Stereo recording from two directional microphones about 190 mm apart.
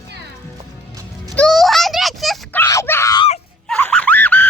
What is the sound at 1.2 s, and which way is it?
Dog, centre (ahead or behind).